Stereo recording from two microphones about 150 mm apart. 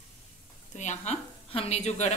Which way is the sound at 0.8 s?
50° left (ahead or behind).